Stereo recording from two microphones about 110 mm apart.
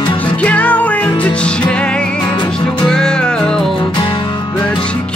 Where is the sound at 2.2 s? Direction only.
40° left (ahead or behind).